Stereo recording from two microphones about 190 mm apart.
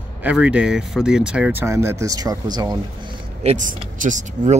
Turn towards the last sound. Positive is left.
turn(degrees=-40)  # may be behind; listen again after turning